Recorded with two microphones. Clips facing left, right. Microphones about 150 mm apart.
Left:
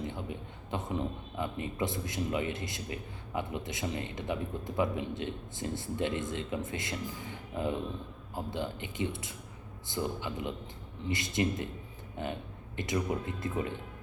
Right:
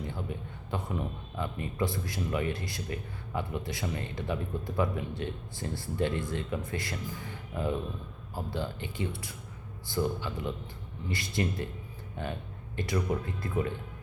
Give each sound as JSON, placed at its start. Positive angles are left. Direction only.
{"t": 0.0, "sound": "a man's voice", "side_deg": 20}